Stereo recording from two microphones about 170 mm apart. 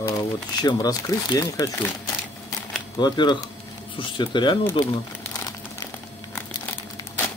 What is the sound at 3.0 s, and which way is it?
Speech, 25° left (ahead or behind).